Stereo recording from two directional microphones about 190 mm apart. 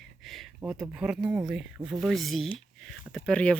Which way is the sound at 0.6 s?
5° right (ahead or behind).